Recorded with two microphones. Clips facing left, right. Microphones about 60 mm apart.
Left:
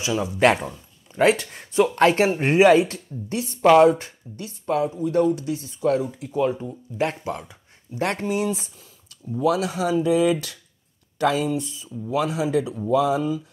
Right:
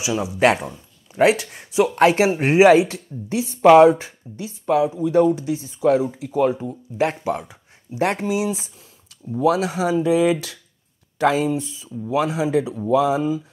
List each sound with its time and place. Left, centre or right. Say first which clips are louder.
0.0 s speech: right 1 dB; centre
9.4 s speech: right 3 dB; right